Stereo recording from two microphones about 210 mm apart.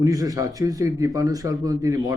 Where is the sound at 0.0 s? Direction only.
15° right (ahead or behind).